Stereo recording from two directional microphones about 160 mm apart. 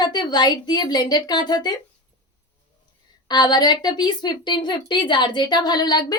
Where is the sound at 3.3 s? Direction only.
25° left (ahead or behind).